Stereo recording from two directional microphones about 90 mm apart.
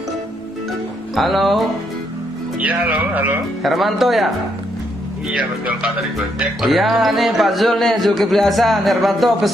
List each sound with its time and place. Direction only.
1.1 s speech: centre (ahead or behind)
2.6 s speech: 15° right (ahead or behind)
3.6 s speech: centre (ahead or behind)
5.4 s speech: 10° right (ahead or behind)